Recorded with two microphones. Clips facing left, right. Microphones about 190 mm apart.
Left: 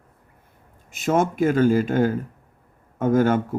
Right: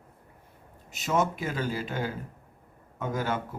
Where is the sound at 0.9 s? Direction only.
50° left (ahead or behind).